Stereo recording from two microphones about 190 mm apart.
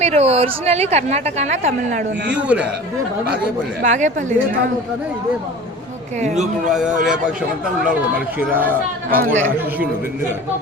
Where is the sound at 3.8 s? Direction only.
40° right (ahead or behind).